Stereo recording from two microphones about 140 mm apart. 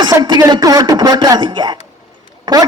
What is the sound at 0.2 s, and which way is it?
A man's voice, 25° right (ahead or behind).